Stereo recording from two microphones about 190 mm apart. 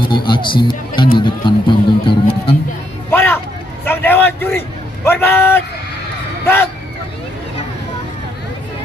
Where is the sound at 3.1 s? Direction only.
10° left (ahead or behind).